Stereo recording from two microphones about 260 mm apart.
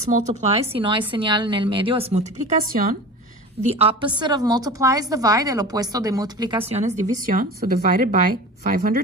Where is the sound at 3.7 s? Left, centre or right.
Right.